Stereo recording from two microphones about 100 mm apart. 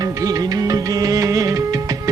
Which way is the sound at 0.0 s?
40° right (ahead or behind).